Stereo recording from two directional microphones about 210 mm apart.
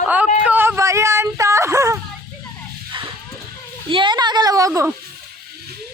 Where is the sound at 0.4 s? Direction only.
10° right (ahead or behind).